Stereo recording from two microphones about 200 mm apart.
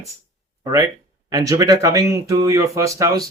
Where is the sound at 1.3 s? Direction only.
15° right (ahead or behind).